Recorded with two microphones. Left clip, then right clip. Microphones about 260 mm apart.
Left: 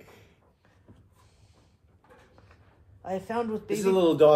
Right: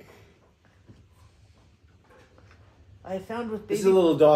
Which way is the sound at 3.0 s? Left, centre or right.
Left.